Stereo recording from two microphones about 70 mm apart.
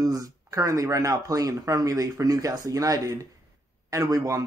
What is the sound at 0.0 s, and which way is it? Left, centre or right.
Speech, right.